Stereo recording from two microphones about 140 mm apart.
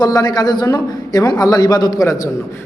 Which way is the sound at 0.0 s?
30° left (ahead or behind).